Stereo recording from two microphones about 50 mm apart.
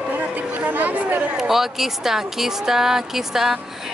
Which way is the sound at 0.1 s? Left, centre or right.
Right.